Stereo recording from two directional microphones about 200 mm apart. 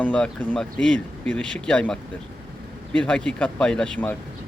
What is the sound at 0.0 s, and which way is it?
Speech, 5° left (ahead or behind).